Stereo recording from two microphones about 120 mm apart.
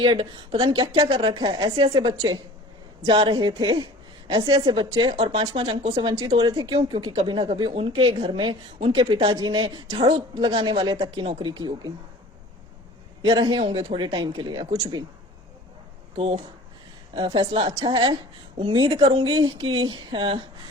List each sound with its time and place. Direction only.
0.0 s a woman's voice: 45° right (ahead or behind)
5.1 s a woman's voice: 55° right (ahead or behind)
9.3 s speech: 35° right (ahead or behind)
9.9 s a woman's voice: 50° right (ahead or behind)
13.2 s speech: 45° right (ahead or behind)
16.1 s a woman's voice: 50° right (ahead or behind)
17.2 s a woman's voice: 40° right (ahead or behind)